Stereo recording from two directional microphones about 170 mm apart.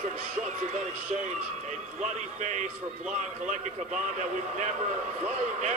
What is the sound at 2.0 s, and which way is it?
Speech, 45° right (ahead or behind).